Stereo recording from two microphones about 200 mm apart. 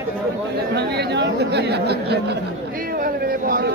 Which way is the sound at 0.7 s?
55° right (ahead or behind).